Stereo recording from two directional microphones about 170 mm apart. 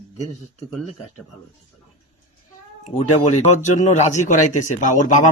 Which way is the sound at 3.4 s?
45° left (ahead or behind).